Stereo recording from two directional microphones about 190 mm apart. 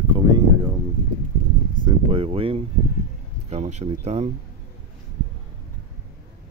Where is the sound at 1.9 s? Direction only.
30° right (ahead or behind).